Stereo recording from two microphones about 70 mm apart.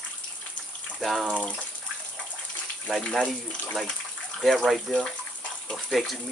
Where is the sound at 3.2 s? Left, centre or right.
Centre.